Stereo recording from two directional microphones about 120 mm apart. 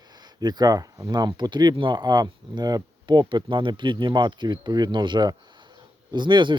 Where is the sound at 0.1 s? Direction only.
35° right (ahead or behind).